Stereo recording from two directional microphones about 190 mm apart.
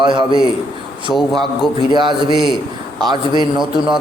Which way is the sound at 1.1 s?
Centre (ahead or behind).